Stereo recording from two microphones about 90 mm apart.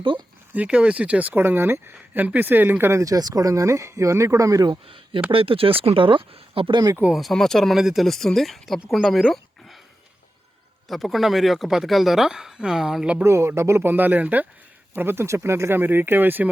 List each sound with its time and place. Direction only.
0.5 s speech: 15° right (ahead or behind)
3.0 s speech: 45° right (ahead or behind)
5.3 s speech: 85° right
7.2 s speech: centre (ahead or behind)
10.8 s speech: centre (ahead or behind)
13.2 s speech: 30° right (ahead or behind)